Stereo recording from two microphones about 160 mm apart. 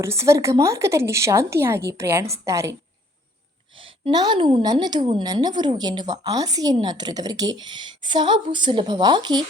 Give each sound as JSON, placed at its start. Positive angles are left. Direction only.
{"t": 0.0, "sound": "speech", "side_deg": -15}
{"t": 3.8, "sound": "a woman's voice", "side_deg": -35}